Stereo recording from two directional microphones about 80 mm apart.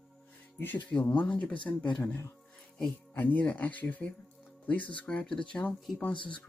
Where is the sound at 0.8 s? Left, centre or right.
Left.